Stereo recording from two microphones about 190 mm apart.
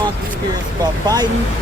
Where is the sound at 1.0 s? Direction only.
20° right (ahead or behind).